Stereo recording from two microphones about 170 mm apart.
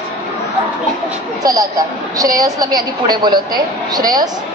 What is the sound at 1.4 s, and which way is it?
A woman's voice, 20° right (ahead or behind).